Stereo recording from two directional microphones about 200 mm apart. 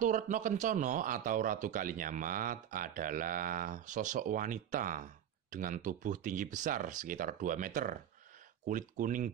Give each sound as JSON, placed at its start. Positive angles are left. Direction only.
{"t": 0.0, "sound": "a man's voice", "side_deg": -40}